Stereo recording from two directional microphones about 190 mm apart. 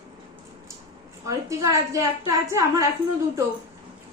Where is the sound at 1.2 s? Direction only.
15° right (ahead or behind).